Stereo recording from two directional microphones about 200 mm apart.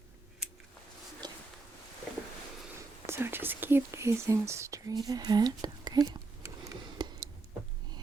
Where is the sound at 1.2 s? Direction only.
20° right (ahead or behind).